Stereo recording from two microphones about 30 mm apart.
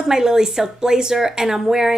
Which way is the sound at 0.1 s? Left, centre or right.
Right.